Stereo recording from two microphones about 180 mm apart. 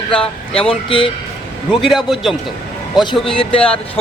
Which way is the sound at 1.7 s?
Centre (ahead or behind).